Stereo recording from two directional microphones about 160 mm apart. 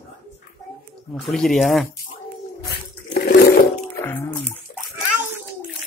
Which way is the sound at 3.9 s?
15° left (ahead or behind).